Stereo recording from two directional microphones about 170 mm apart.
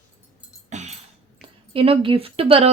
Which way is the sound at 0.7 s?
40° right (ahead or behind).